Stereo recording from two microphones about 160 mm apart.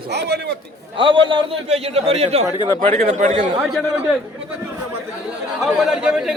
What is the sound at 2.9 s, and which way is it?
Speech, 50° right (ahead or behind).